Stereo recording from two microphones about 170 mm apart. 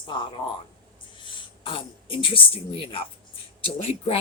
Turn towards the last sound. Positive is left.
turn(degrees=35)  # may be behind; listen again after turning